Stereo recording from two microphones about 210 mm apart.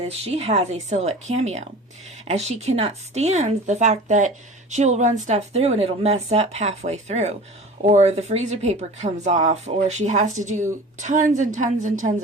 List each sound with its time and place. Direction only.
0.0 s speech: 30° right (ahead or behind)